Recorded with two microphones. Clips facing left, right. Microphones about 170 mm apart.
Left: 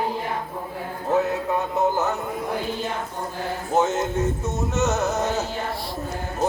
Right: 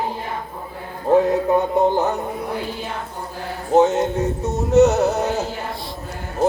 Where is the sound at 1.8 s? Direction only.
35° right (ahead or behind).